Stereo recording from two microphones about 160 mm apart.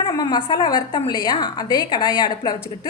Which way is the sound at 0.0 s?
30° left (ahead or behind).